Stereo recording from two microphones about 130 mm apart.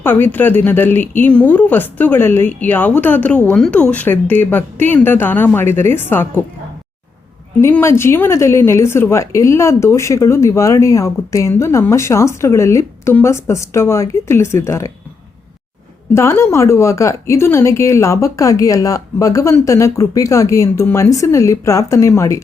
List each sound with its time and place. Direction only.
0.0 s speech: 15° left (ahead or behind)
7.6 s speech: 20° left (ahead or behind)
16.1 s speech: 20° left (ahead or behind)